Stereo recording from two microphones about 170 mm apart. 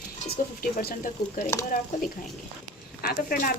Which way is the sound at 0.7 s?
55° left (ahead or behind).